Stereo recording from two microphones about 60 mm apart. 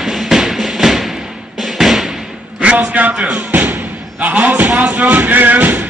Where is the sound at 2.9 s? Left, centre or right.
Right.